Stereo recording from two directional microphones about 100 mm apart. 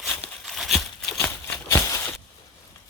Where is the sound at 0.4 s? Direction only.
Centre (ahead or behind).